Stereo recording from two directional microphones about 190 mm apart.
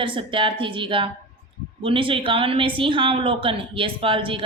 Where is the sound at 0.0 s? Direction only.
25° right (ahead or behind).